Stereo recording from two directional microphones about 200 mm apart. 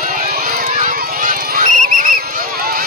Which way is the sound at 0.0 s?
40° right (ahead or behind).